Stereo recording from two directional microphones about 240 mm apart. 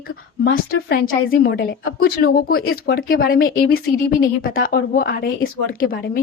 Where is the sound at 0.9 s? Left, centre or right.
Left.